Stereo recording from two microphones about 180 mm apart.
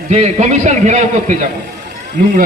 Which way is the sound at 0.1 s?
40° right (ahead or behind).